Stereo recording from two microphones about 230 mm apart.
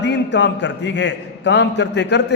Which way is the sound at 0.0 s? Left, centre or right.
Left.